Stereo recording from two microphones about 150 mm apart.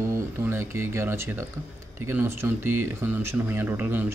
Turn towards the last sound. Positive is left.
turn(degrees=-10)  # may be behind; listen again after turning